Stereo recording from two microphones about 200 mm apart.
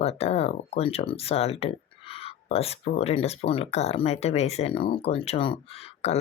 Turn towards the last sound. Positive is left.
turn(degrees=30)  # may be behind; listen again after turning